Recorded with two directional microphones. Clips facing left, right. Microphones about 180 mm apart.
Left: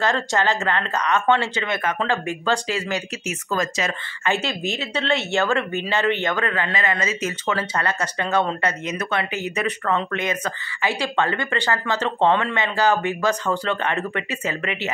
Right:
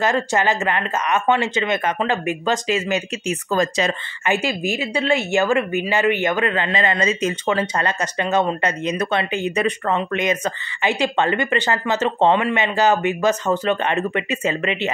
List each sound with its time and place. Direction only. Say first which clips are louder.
0.0 s a woman's voice: right 2 dB; 15° right (ahead or behind)
4.2 s a woman's voice: right 2 dB; 15° right (ahead or behind)
8.8 s speech: right 4 dB; 30° right (ahead or behind)